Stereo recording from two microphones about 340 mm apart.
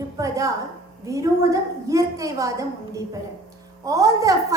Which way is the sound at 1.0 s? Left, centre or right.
Centre.